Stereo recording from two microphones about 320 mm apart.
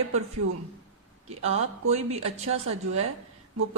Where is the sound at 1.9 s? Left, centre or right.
Right.